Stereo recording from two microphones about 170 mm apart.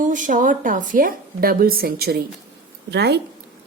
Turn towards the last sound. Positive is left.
turn(degrees=-80)